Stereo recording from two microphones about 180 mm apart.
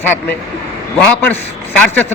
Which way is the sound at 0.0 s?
10° left (ahead or behind).